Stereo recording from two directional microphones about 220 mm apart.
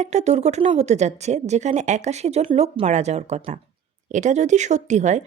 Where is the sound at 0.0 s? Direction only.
30° right (ahead or behind).